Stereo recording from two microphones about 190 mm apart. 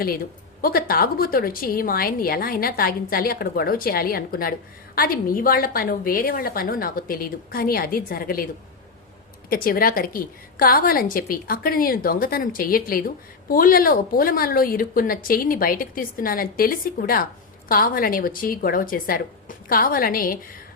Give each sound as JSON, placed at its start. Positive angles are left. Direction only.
{"t": 0.6, "sound": "a woman's voice", "side_deg": 50}
{"t": 9.5, "sound": "a woman's voice", "side_deg": 50}